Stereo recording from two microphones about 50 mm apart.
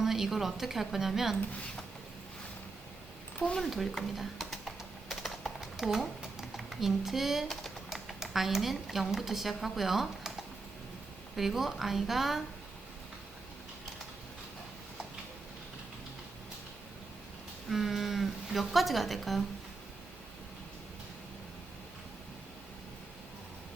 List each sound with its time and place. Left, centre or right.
0.0 s a woman's voice: centre
3.4 s speech: centre
3.7 s typing: centre
6.4 s speech: centre
11.3 s a woman's voice: centre
17.7 s a woman's voice: centre